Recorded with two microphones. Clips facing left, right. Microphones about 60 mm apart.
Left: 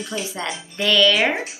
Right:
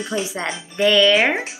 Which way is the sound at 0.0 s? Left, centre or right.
Right.